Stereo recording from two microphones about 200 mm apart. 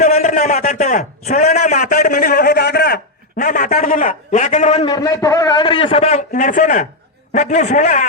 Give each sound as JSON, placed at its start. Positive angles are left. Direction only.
{"t": 0.0, "sound": "a man's voice", "side_deg": 35}
{"t": 4.9, "sound": "a man's voice", "side_deg": 20}